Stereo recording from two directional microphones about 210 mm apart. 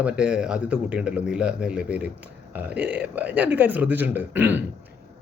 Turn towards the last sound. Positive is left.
turn(degrees=-10)  # may be behind; listen again after turning